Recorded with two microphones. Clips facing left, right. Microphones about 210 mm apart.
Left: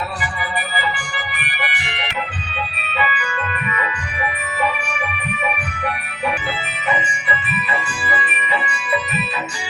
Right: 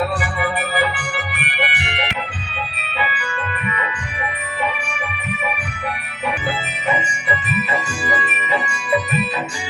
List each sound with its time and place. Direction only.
0.8 s organ: 65° right (ahead or behind)
6.8 s music: 40° right (ahead or behind)